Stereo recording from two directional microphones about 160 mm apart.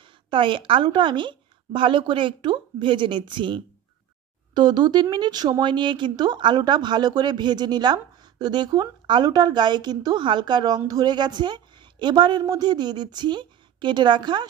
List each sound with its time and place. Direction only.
0.0 s a woman's voice: 30° right (ahead or behind)